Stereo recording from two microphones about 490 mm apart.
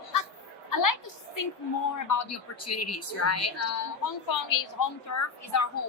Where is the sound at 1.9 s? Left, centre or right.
Left.